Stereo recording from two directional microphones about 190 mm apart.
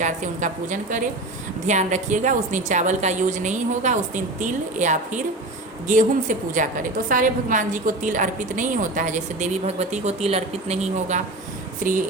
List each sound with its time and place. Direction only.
0.0 s a woman's voice: 40° right (ahead or behind)